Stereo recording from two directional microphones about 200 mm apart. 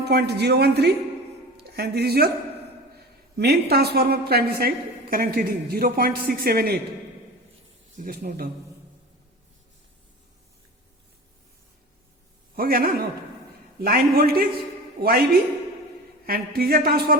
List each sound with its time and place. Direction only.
0.0 s a woman's voice: 55° right (ahead or behind)
3.3 s speech: 55° right (ahead or behind)
7.9 s speech: 45° right (ahead or behind)
12.5 s speech: 50° right (ahead or behind)
16.2 s speech: 50° right (ahead or behind)